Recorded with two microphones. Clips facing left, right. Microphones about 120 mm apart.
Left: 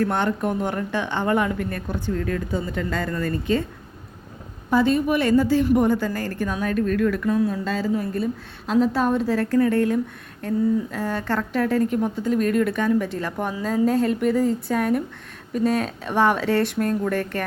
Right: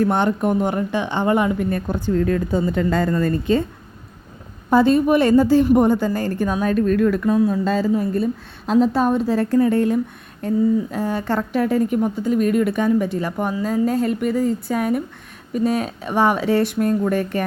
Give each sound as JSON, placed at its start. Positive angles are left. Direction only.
{"t": 0.0, "sound": "a woman's voice", "side_deg": -20}
{"t": 1.9, "sound": "a woman's voice", "side_deg": -30}
{"t": 4.7, "sound": "a woman's voice", "side_deg": -35}
{"t": 8.7, "sound": "a woman's voice", "side_deg": -20}